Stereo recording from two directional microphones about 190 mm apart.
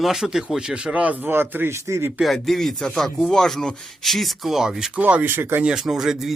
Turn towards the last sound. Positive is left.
turn(degrees=0)  # may be behind; listen again after turning